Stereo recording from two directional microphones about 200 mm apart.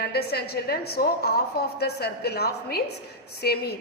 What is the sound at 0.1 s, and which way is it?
A woman's voice, 55° left (ahead or behind).